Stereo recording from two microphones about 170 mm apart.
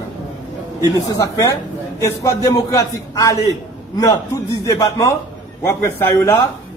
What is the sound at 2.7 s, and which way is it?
A man's voice, 20° left (ahead or behind).